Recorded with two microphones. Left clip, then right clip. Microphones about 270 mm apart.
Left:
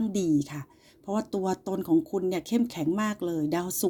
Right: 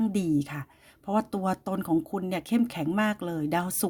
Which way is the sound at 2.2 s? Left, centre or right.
Right.